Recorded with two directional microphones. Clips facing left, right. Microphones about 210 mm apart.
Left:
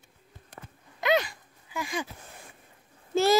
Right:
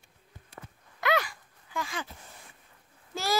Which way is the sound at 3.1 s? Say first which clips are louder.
Left 8 dB; 25° left (ahead or behind).